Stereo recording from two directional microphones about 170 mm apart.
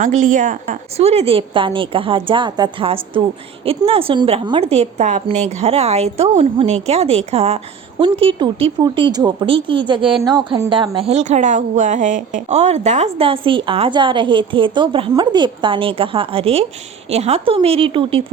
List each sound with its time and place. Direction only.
0.0 s a woman's voice: 50° right (ahead or behind)
0.9 s speech: 40° right (ahead or behind)